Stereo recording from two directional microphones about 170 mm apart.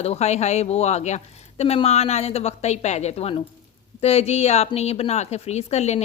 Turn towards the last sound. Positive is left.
turn(degrees=40)  # may be behind; listen again after turning